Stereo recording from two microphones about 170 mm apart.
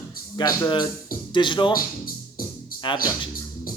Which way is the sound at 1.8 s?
55° left (ahead or behind).